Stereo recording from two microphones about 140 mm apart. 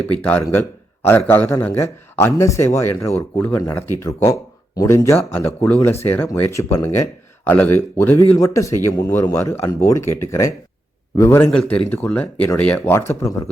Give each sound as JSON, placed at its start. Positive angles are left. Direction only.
{"t": 0.1, "sound": "speech", "side_deg": 10}